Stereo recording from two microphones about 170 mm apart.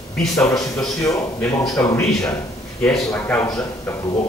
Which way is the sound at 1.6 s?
5° left (ahead or behind).